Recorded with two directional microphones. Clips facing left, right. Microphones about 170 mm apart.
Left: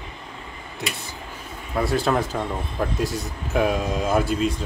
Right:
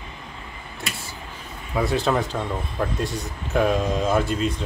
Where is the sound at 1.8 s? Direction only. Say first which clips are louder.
Even; centre (ahead or behind).